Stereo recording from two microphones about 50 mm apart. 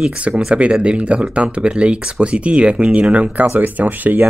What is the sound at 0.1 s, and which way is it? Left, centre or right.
Speech, right.